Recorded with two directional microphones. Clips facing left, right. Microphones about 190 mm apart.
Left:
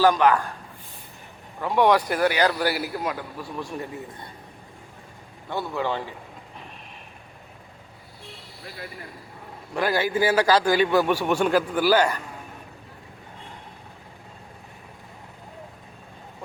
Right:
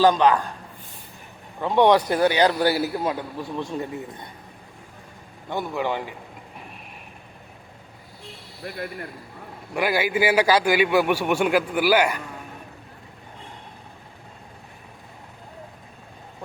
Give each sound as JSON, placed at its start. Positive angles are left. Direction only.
{"t": 0.0, "sound": "a man's voice", "side_deg": -20}
{"t": 1.6, "sound": "a man's voice", "side_deg": -20}
{"t": 5.5, "sound": "a man's voice", "side_deg": -15}
{"t": 9.7, "sound": "a man's voice", "side_deg": -10}